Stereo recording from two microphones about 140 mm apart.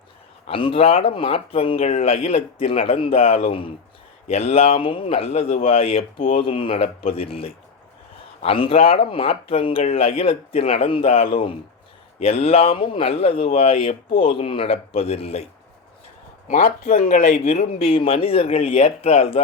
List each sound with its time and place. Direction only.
0.4 s speech: 40° left (ahead or behind)
16.9 s speech: 75° left (ahead or behind)
17.7 s speech: 40° left (ahead or behind)